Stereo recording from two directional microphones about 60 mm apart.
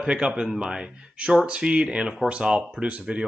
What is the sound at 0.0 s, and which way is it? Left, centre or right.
Speech, centre.